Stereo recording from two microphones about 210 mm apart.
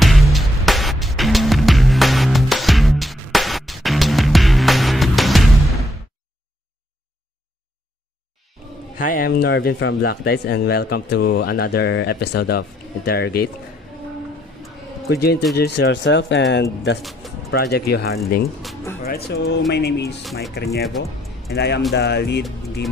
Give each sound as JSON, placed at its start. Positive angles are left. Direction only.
{"t": 0.0, "sound": "music", "side_deg": 0}
{"t": 8.9, "sound": "speech", "side_deg": 40}
{"t": 15.0, "sound": "speech", "side_deg": 50}
{"t": 17.0, "sound": "speech", "side_deg": 0}
{"t": 17.5, "sound": "speech", "side_deg": 50}
{"t": 20.8, "sound": "music", "side_deg": 0}
{"t": 21.5, "sound": "speech", "side_deg": 50}